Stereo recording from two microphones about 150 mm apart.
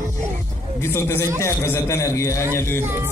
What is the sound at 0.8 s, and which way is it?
A man's voice, 15° left (ahead or behind).